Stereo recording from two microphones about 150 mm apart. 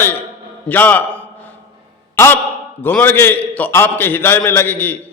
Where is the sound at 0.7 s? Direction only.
10° left (ahead or behind).